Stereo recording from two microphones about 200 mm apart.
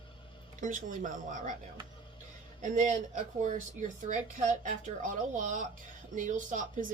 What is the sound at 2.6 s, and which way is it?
Speech, 40° right (ahead or behind).